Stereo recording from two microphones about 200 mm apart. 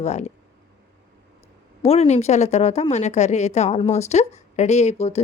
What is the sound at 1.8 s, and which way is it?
A woman's voice, 30° left (ahead or behind).